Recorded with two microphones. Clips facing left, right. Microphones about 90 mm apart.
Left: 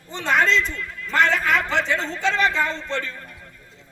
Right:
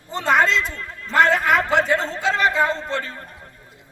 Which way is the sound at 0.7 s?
40° right (ahead or behind).